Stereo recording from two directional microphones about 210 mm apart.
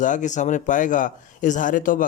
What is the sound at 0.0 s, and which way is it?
Speech, 35° left (ahead or behind).